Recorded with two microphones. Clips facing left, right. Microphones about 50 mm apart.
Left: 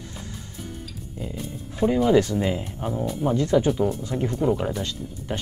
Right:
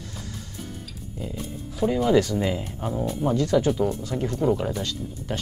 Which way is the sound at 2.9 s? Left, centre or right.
Centre.